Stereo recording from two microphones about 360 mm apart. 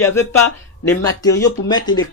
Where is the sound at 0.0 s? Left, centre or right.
Centre.